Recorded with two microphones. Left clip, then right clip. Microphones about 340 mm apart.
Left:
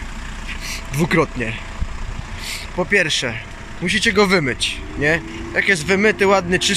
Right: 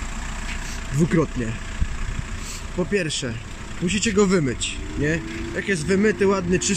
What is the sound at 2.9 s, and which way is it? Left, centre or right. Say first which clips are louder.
Speech: left 9 dB; centre.